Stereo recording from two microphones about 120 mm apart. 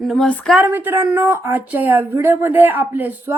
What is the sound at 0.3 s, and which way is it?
Speech, 10° left (ahead or behind).